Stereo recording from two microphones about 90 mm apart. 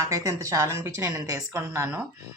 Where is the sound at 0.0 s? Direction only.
40° right (ahead or behind).